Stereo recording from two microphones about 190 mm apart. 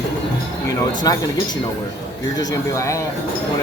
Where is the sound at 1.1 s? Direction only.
20° left (ahead or behind).